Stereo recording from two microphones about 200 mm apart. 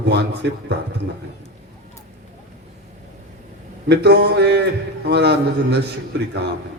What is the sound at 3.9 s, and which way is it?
A man's voice, 55° right (ahead or behind).